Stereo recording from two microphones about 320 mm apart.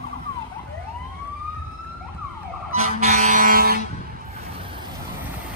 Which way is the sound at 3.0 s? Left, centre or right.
Right.